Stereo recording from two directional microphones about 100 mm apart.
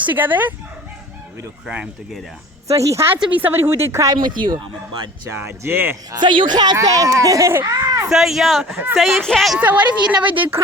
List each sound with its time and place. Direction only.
0.0 s a woman's voice: 20° right (ahead or behind)
1.6 s a woman's voice: 10° right (ahead or behind)
2.6 s speech: 30° right (ahead or behind)
4.2 s speech: 50° right (ahead or behind)
5.3 s speech: 25° right (ahead or behind)
6.1 s speech: 50° right (ahead or behind)
6.7 s speech: 35° right (ahead or behind)
8.0 s speech: 5° right (ahead or behind)
9.6 s a woman's voice: 15° right (ahead or behind)